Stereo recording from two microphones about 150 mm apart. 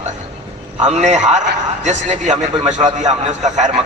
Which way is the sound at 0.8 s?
50° right (ahead or behind).